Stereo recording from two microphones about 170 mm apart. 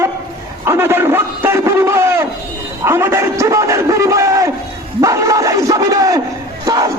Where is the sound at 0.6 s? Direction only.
15° right (ahead or behind).